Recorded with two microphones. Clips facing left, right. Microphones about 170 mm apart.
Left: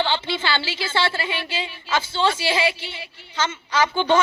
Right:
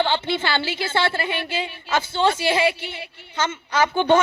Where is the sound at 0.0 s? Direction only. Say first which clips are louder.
Right 2 dB; 55° right (ahead or behind).